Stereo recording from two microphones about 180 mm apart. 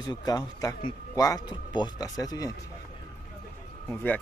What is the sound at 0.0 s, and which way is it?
A man's voice, 20° left (ahead or behind).